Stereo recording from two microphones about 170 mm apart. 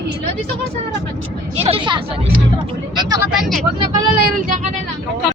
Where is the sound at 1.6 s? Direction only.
30° right (ahead or behind).